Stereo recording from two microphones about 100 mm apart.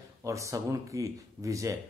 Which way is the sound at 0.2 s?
30° right (ahead or behind).